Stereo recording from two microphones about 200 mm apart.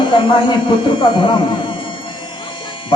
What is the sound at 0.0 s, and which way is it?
Speech, 25° left (ahead or behind).